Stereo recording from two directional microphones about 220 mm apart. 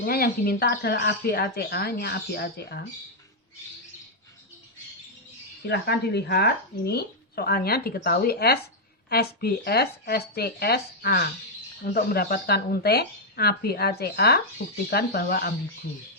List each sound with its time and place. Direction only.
0.0 s speech: 45° left (ahead or behind)
5.6 s speech: 50° left (ahead or behind)